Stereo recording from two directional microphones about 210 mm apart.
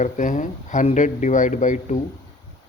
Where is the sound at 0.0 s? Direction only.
35° left (ahead or behind).